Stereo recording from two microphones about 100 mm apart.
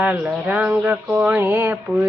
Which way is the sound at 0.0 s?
15° right (ahead or behind).